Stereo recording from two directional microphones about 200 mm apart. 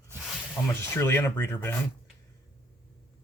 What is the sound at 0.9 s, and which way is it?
Speech, 10° left (ahead or behind).